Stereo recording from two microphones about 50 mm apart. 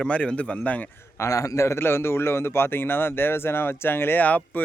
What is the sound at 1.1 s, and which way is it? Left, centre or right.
A man's voice, left.